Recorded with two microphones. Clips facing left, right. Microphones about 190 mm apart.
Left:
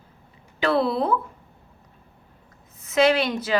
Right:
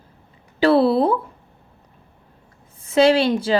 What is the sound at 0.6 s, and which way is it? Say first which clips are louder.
Speech: right 7 dB; 35° right (ahead or behind).